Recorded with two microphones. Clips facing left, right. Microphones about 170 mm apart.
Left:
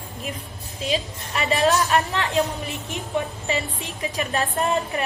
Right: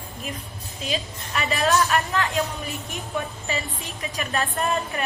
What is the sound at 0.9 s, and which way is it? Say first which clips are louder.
A woman's voice: left 2 dB; 30° left (ahead or behind).